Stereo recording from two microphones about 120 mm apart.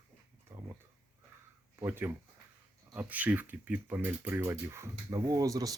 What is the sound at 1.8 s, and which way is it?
Speech, 15° right (ahead or behind).